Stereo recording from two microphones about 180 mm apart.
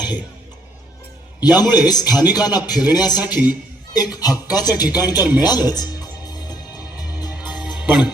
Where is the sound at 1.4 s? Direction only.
20° left (ahead or behind).